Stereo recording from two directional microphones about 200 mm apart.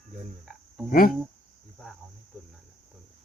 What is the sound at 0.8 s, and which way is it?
Speech, 45° left (ahead or behind).